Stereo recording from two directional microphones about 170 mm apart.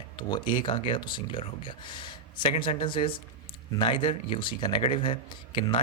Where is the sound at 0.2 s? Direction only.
25° left (ahead or behind).